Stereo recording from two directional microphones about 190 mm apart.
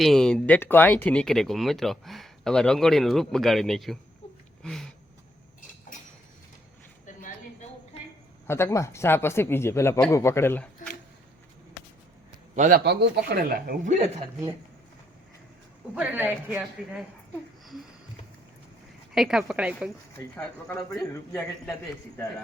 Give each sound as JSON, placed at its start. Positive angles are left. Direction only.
{"t": 0.0, "sound": "speech", "side_deg": 5}
{"t": 4.6, "sound": "a sound", "side_deg": 0}
{"t": 7.0, "sound": "a sound", "side_deg": 45}
{"t": 8.4, "sound": "speech", "side_deg": 15}
{"t": 12.5, "sound": "a man's voice", "side_deg": -40}
{"t": 12.8, "sound": "speech", "side_deg": -60}
{"t": 16.0, "sound": "a woman's voice", "side_deg": -10}
{"t": 19.1, "sound": "speech", "side_deg": 0}
{"t": 20.1, "sound": "speech", "side_deg": 10}